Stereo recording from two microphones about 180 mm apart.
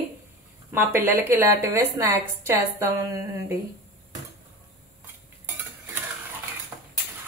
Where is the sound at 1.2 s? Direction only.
15° right (ahead or behind).